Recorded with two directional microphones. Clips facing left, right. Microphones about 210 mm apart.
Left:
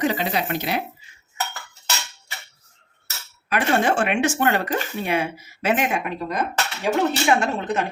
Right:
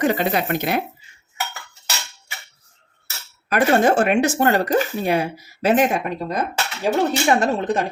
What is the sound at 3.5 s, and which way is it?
Speech, 40° right (ahead or behind).